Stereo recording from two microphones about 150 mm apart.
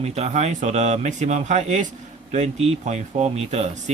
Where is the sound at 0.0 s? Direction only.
45° right (ahead or behind).